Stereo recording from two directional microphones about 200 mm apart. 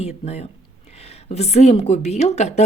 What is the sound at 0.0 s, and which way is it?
A woman's voice, 30° left (ahead or behind).